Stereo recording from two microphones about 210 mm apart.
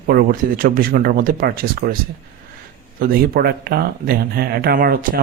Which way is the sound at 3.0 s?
45° right (ahead or behind).